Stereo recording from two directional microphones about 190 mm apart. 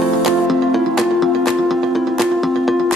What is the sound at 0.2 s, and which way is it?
Music, centre (ahead or behind).